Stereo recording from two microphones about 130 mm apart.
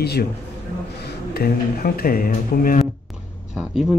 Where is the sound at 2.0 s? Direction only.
90° left.